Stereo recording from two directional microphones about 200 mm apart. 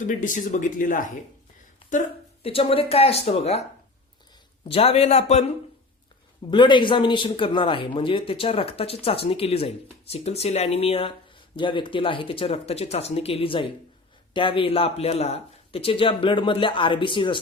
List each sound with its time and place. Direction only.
0.0 s speech: 40° left (ahead or behind)
4.7 s speech: 30° left (ahead or behind)
6.5 s speech: 25° left (ahead or behind)